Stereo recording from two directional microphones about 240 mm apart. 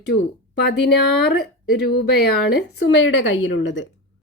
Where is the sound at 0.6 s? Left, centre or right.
Left.